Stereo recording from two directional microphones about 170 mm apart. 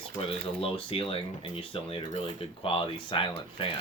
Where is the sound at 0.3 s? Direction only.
35° left (ahead or behind).